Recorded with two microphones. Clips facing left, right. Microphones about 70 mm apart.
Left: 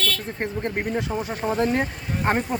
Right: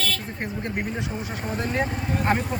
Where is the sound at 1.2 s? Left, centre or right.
Left.